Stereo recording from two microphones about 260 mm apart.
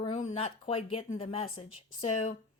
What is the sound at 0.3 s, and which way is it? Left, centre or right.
A woman's voice, left.